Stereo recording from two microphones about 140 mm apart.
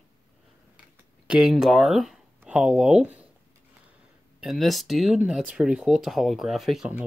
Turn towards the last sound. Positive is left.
turn(degrees=-5)  # may be behind; listen again after turning